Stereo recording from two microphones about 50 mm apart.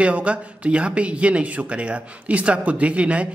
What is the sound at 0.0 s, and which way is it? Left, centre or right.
Speech, right.